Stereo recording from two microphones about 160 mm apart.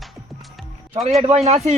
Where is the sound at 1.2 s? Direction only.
40° right (ahead or behind).